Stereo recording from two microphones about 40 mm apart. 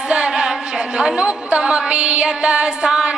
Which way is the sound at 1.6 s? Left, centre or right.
Right.